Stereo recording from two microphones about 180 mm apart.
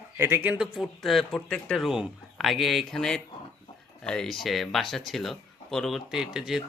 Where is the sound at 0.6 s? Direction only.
Centre (ahead or behind).